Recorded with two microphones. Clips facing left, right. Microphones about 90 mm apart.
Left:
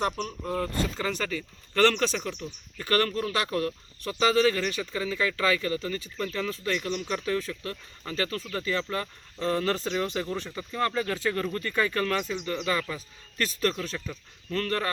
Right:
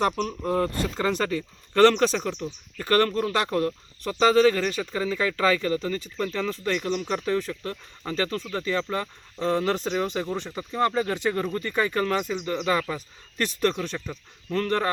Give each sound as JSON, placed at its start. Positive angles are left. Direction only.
{"t": 0.2, "sound": "speech", "side_deg": -35}
{"t": 12.6, "sound": "speech", "side_deg": -30}